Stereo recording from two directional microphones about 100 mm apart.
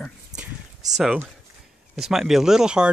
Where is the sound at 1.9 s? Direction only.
5° right (ahead or behind).